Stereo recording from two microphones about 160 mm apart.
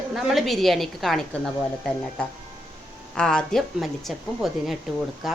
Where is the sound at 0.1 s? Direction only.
Centre (ahead or behind).